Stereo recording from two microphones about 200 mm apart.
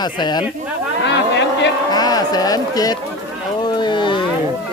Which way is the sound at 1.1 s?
60° left (ahead or behind).